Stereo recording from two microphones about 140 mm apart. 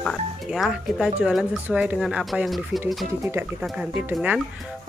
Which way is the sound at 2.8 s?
20° right (ahead or behind).